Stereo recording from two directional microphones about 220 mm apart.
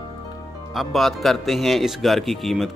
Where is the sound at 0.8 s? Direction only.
Centre (ahead or behind).